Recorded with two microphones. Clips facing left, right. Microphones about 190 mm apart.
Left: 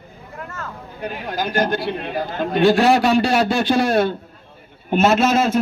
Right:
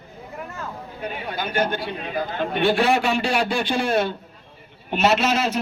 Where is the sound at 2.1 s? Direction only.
40° left (ahead or behind).